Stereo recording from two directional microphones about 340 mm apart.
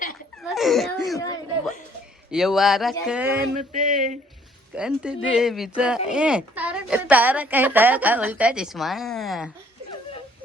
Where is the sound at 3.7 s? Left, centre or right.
Right.